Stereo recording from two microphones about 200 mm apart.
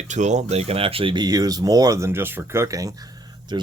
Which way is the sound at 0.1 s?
35° right (ahead or behind).